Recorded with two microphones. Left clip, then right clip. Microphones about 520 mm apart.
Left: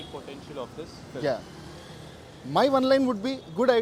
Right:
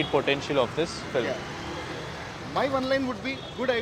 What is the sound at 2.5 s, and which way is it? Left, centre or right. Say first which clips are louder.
A man's voice: left 5 dB; left.